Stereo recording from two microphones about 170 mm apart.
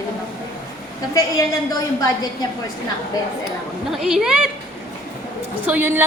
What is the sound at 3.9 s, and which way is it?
Speech, 5° right (ahead or behind).